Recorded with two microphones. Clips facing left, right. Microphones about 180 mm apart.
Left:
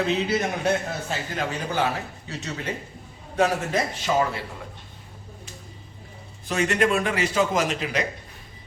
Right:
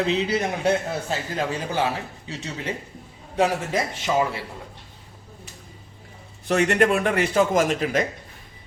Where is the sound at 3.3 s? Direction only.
15° right (ahead or behind).